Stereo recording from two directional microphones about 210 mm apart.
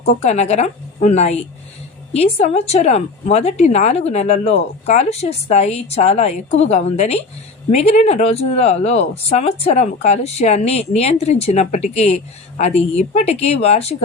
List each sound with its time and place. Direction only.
0.2 s speech: 30° left (ahead or behind)